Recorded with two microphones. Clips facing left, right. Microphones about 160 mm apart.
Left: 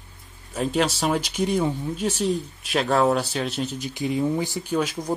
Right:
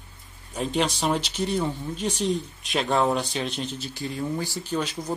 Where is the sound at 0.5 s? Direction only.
Centre (ahead or behind).